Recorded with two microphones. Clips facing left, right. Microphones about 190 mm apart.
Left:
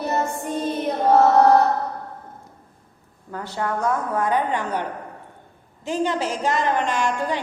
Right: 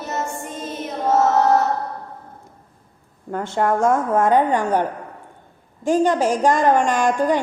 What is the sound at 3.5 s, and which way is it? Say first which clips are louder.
A woman's voice: right 6 dB; 45° right (ahead or behind).